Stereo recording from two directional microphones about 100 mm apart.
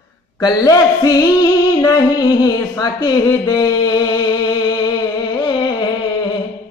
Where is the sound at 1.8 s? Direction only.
40° left (ahead or behind).